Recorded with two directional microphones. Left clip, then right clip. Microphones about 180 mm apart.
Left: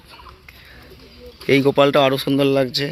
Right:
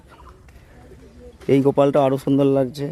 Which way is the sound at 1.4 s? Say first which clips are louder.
Left 2 dB; 10° right (ahead or behind).